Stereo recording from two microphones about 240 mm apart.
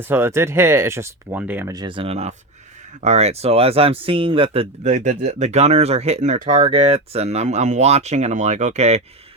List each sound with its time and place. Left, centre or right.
0.0 s speech: centre; by 9.0 s right